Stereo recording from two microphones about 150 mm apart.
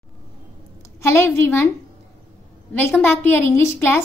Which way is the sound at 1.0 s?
15° left (ahead or behind).